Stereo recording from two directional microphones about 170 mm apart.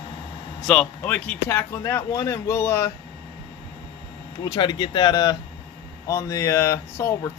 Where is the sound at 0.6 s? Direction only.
5° left (ahead or behind).